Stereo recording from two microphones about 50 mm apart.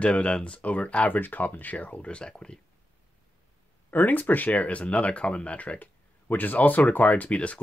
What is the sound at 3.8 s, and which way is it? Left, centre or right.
Speech, left.